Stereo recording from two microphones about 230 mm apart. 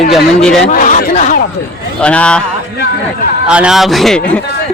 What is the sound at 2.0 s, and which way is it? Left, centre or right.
Speech, centre.